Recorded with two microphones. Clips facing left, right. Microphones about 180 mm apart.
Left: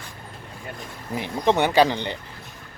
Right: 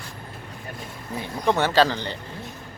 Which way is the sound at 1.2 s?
20° left (ahead or behind).